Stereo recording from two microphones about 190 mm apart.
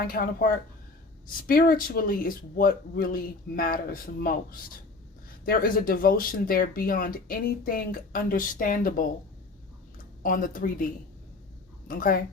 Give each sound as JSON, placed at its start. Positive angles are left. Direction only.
{"t": 0.0, "sound": "speech", "side_deg": 50}
{"t": 10.2, "sound": "speech", "side_deg": 45}
{"t": 11.9, "sound": "speech", "side_deg": 50}